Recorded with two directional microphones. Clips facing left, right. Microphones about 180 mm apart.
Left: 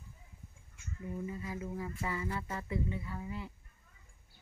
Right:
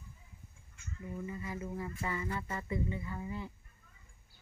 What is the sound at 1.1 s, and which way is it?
Speech, 5° left (ahead or behind).